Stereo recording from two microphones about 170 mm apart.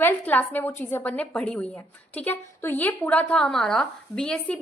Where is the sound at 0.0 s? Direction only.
10° left (ahead or behind).